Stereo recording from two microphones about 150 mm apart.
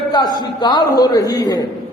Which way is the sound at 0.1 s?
25° left (ahead or behind).